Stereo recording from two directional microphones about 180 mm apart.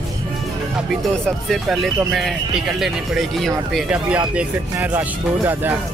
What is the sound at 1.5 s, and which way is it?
Speech, centre (ahead or behind).